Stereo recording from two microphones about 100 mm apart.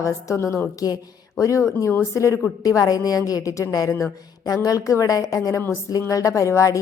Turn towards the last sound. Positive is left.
turn(degrees=30)  # may be behind; listen again after turning